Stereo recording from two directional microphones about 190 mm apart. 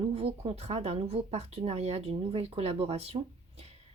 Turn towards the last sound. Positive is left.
turn(degrees=-30)  # may be behind; listen again after turning